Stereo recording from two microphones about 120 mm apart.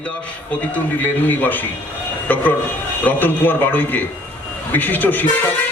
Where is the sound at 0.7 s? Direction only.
15° left (ahead or behind).